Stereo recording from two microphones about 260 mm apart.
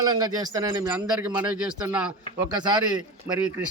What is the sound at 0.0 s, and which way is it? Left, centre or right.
Speech, centre.